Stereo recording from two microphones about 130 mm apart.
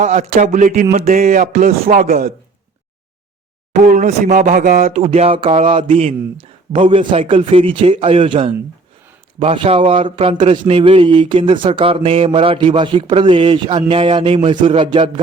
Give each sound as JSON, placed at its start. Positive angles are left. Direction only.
{"t": 0.0, "sound": "speech", "side_deg": -65}
{"t": 0.9, "sound": "speech", "side_deg": -60}
{"t": 3.8, "sound": "speech", "side_deg": -70}
{"t": 5.1, "sound": "a man's voice", "side_deg": -50}